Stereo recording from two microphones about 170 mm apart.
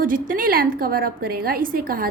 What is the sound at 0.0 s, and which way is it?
A woman's voice, 55° right (ahead or behind).